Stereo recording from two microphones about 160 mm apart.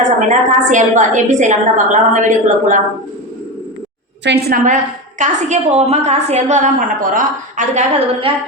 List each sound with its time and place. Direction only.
0.3 s a woman's voice: 50° right (ahead or behind)
4.2 s a woman's voice: 90° right
5.2 s a woman's voice: 45° right (ahead or behind)